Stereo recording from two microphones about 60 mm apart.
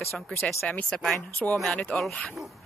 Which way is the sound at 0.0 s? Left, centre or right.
Centre.